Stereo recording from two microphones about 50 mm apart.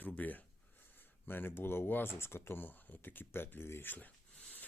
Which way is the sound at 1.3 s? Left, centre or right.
Left.